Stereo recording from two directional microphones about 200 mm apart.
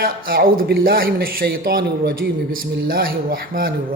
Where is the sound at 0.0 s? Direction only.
50° right (ahead or behind).